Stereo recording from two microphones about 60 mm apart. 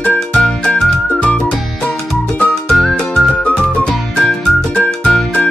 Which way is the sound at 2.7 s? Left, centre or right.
Centre.